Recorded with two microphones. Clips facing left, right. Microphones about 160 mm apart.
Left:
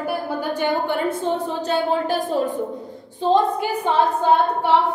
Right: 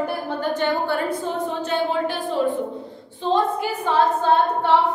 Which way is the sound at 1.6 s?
35° left (ahead or behind).